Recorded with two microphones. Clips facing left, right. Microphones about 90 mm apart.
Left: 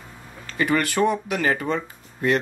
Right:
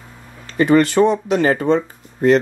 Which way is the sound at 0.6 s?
25° right (ahead or behind).